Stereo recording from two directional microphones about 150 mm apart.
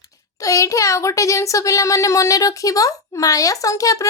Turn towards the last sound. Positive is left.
turn(degrees=20)  # may be behind; listen again after turning